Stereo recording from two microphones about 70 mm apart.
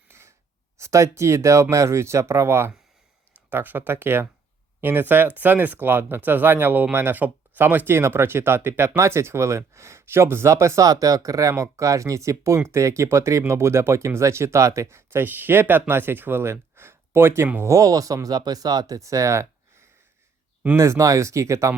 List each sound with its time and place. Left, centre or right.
0.1 s a sound: right
0.8 s speech: right
17.6 s speech: right
20.7 s speech: right